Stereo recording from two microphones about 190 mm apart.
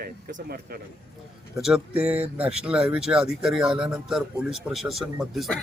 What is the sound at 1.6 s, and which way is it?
Speech, 5° right (ahead or behind).